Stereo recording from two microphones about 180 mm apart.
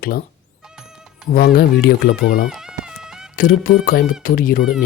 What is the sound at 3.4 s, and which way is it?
Speech, 50° left (ahead or behind).